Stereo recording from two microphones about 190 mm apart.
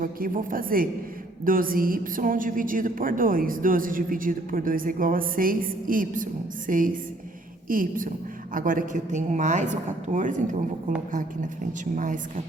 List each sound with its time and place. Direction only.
0.0 s a woman's voice: 50° right (ahead or behind)
11.9 s a woman's voice: 45° right (ahead or behind)